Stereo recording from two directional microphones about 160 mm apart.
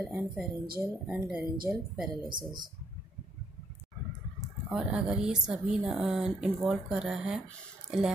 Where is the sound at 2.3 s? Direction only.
30° right (ahead or behind).